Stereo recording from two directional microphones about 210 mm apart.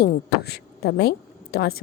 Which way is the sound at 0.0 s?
50° left (ahead or behind).